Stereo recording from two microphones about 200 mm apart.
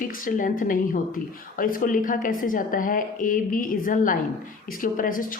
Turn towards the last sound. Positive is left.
turn(degrees=45)  # may be behind; listen again after turning